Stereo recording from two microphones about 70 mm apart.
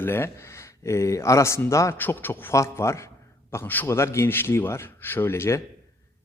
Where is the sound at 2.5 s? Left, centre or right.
Left.